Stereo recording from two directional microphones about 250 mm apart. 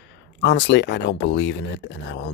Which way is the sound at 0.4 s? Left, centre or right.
Left.